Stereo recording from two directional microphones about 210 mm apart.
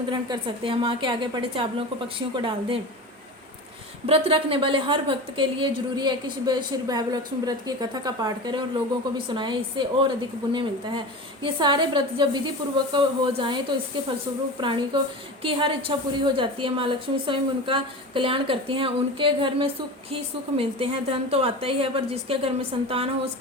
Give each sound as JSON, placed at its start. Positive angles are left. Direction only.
{"t": 0.1, "sound": "a woman's voice", "side_deg": -25}
{"t": 4.0, "sound": "a woman's voice", "side_deg": -25}